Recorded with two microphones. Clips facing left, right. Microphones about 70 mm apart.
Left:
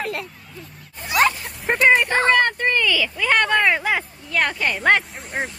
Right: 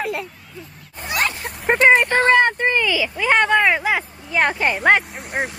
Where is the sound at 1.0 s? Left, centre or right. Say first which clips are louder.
Left 4 dB; centre.